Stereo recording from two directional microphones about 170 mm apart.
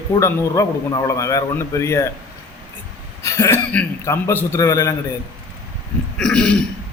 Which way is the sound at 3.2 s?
15° left (ahead or behind).